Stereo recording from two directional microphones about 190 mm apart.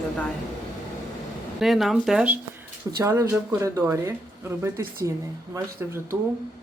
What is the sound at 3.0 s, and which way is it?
Speech, 15° right (ahead or behind).